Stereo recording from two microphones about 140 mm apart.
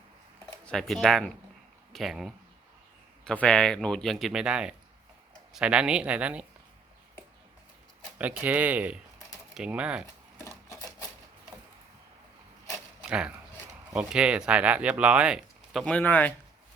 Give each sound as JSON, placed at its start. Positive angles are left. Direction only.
{"t": 0.6, "sound": "speech", "side_deg": 5}
{"t": 8.2, "sound": "speech", "side_deg": -10}
{"t": 10.4, "sound": "filing", "side_deg": 20}
{"t": 13.1, "sound": "speech", "side_deg": -5}